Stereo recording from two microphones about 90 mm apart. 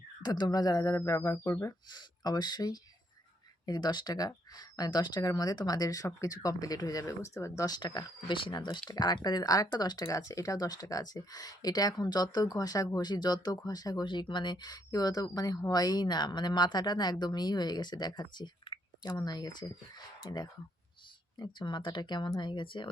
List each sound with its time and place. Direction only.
0.2 s speech: 50° left (ahead or behind)
0.9 s speech: 35° left (ahead or behind)
1.9 s speech: 50° left (ahead or behind); by 7.7 s 30° left (ahead or behind)
7.7 s speech: 50° left (ahead or behind)
8.3 s speech: 65° left (ahead or behind)